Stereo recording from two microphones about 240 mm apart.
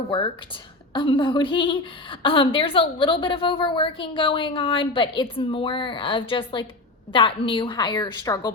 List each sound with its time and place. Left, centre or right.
0.9 s a woman's voice: left